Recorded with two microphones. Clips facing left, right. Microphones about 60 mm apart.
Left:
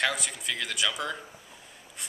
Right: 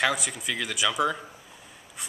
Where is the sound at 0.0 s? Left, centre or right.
Centre.